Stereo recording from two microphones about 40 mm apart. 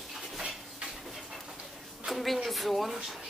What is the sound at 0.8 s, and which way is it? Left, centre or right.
Pant, centre.